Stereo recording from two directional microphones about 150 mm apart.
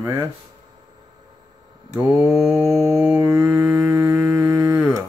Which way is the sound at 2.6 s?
20° right (ahead or behind).